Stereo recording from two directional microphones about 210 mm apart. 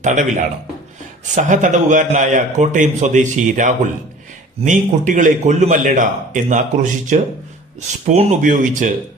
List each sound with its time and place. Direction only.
0.0 s a man's voice: 35° right (ahead or behind)
1.4 s a man's voice: 35° right (ahead or behind)